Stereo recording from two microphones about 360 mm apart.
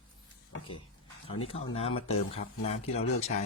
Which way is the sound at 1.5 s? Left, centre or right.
Centre.